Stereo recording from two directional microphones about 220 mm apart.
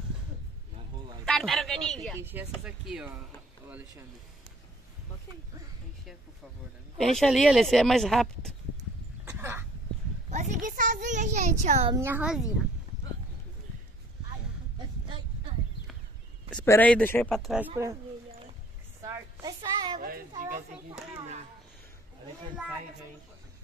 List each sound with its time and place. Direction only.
1.2 s speech: centre (ahead or behind)
2.1 s speech: 10° right (ahead or behind)
7.0 s speech: centre (ahead or behind)
9.2 s throat clearing: 10° right (ahead or behind)
10.3 s a child's voice: 30° right (ahead or behind)
11.9 s a woman's voice: 10° right (ahead or behind)
15.0 s a sound: 20° right (ahead or behind)
16.4 s speech: 5° left (ahead or behind)
19.0 s a sound: 15° right (ahead or behind)
20.0 s children playing: 40° right (ahead or behind)